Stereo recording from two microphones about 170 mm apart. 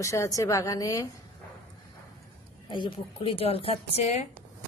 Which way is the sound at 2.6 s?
30° left (ahead or behind).